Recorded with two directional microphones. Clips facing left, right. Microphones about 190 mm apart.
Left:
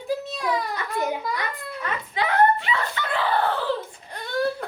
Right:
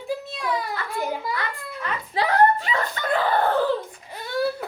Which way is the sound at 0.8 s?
20° left (ahead or behind).